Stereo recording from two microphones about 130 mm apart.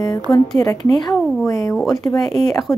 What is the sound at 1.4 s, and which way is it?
Speech, 25° left (ahead or behind).